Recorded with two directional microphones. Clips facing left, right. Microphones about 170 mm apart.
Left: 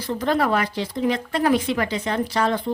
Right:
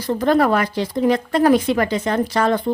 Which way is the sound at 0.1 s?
45° right (ahead or behind).